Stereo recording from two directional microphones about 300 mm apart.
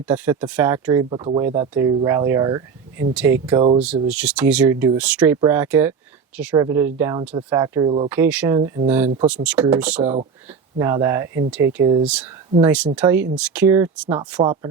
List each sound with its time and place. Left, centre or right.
0.1 s speech: centre
8.1 s speech: centre
10.0 s speech: right
10.8 s speech: centre
14.4 s speech: centre